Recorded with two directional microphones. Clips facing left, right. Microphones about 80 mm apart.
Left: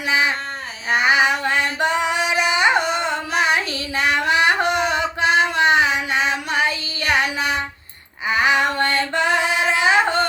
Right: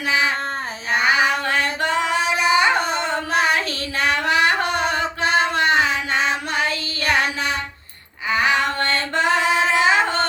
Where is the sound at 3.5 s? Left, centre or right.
Centre.